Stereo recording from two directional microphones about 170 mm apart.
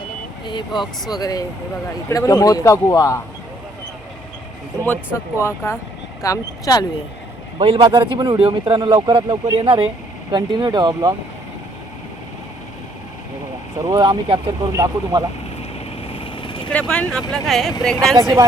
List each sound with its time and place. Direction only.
0.4 s speech: 25° left (ahead or behind)
5.4 s speech: 15° left (ahead or behind)
7.6 s speech: 30° right (ahead or behind)
13.8 s speech: 25° right (ahead or behind)
16.1 s vehicle: 30° left (ahead or behind)
16.7 s speech: 5° left (ahead or behind)
18.2 s speech: 20° right (ahead or behind)